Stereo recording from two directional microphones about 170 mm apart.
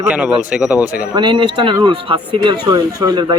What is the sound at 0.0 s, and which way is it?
Speech, 10° right (ahead or behind).